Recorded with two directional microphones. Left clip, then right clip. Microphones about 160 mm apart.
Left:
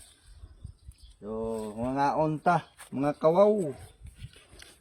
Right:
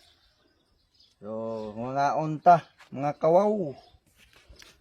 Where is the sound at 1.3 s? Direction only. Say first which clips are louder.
Even; 40° right (ahead or behind).